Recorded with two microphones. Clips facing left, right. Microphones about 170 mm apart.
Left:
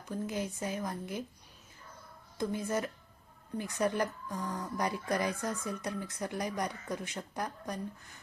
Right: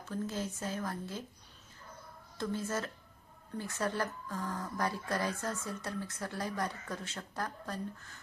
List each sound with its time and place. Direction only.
0.0 s speech: 15° left (ahead or behind)
2.4 s speech: 15° left (ahead or behind)